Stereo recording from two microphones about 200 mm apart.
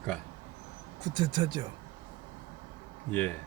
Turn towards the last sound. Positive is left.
turn(degrees=5)  # may be behind; listen again after turning